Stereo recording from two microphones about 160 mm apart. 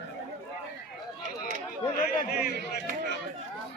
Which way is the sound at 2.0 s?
75° left (ahead or behind).